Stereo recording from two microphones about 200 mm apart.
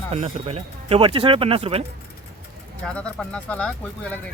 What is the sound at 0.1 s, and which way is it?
Speech, 30° right (ahead or behind).